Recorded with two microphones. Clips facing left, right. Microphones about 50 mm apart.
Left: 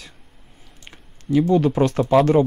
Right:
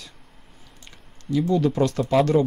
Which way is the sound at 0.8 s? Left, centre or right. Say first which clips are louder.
Left 5 dB; left.